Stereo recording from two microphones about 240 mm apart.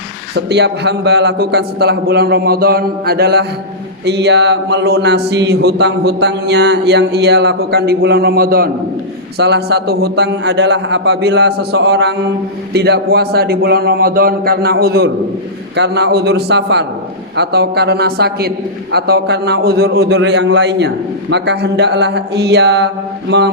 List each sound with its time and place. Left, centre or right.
0.3 s a man's voice: right